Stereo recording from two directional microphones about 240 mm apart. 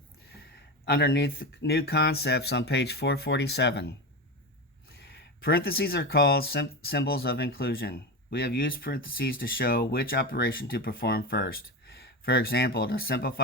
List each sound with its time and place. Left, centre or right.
0.9 s speech: left